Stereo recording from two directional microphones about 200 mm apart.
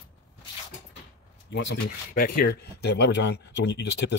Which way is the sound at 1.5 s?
60° left (ahead or behind).